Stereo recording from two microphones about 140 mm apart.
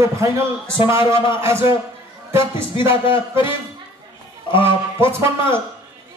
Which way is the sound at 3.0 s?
35° left (ahead or behind).